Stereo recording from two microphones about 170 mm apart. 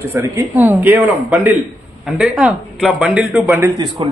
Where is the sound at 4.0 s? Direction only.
30° right (ahead or behind).